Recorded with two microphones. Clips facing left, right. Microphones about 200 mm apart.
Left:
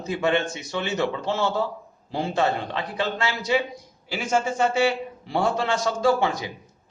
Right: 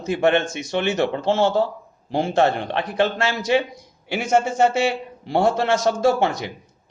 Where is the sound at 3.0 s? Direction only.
80° right.